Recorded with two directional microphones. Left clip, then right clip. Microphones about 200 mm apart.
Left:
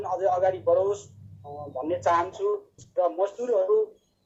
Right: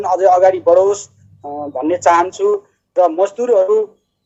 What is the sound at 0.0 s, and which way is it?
Speech, 35° right (ahead or behind).